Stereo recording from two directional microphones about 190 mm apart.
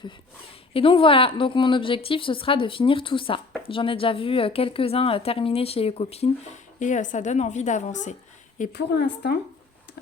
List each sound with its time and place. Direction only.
0.7 s a woman's voice: 30° left (ahead or behind)
8.7 s a woman's voice: 60° left (ahead or behind)